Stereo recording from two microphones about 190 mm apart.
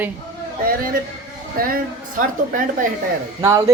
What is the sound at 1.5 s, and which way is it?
Speech, 50° right (ahead or behind).